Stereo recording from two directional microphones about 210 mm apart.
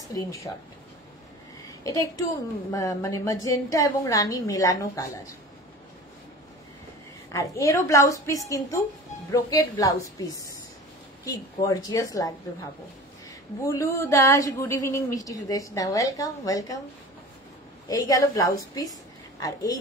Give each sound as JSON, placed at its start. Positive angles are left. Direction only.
{"t": 0.1, "sound": "a woman's voice", "side_deg": 15}
{"t": 1.8, "sound": "a woman's voice", "side_deg": 15}
{"t": 7.3, "sound": "a woman's voice", "side_deg": 15}
{"t": 13.6, "sound": "a woman's voice", "side_deg": 15}
{"t": 17.8, "sound": "a woman's voice", "side_deg": 15}